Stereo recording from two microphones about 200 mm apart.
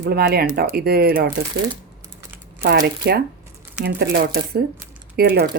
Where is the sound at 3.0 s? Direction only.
55° right (ahead or behind).